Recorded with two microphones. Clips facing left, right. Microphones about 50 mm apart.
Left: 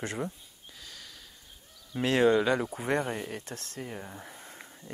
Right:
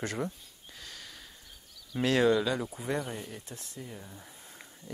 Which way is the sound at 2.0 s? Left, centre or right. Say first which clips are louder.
Left 2 dB; left.